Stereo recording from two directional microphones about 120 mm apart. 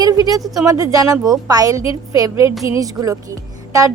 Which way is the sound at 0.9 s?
30° right (ahead or behind).